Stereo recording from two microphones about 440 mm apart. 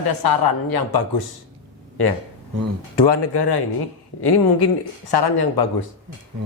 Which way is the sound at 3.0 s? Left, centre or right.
Left.